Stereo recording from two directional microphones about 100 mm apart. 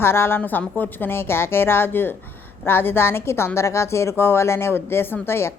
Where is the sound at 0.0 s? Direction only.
25° left (ahead or behind).